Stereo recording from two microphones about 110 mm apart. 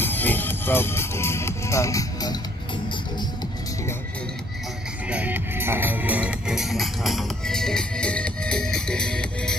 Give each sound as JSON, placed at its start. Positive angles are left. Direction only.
{"t": 0.0, "sound": "music", "side_deg": 15}
{"t": 5.1, "sound": "music", "side_deg": -15}